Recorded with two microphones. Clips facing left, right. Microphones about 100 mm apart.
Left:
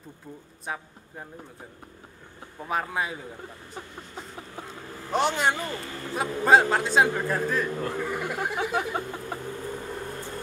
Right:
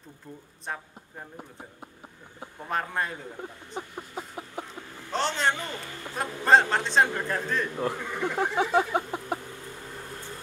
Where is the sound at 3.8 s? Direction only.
15° right (ahead or behind).